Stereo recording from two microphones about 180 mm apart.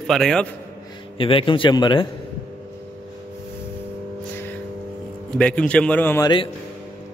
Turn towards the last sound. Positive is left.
turn(degrees=10)  # may be behind; listen again after turning